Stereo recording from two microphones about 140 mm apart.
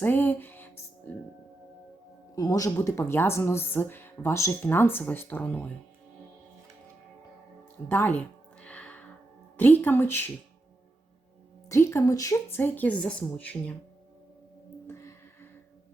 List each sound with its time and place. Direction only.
0.0 s speech: 15° left (ahead or behind)
2.3 s speech: 25° left (ahead or behind)
7.9 s a sound: 15° left (ahead or behind)
9.6 s speech: 15° left (ahead or behind)
11.7 s speech: 20° left (ahead or behind)
14.8 s music: 20° left (ahead or behind)